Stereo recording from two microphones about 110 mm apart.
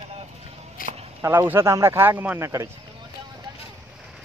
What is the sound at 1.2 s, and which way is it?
Speech, 20° right (ahead or behind).